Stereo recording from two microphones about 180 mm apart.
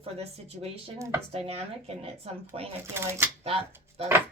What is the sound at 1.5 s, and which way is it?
A woman's voice, 35° right (ahead or behind).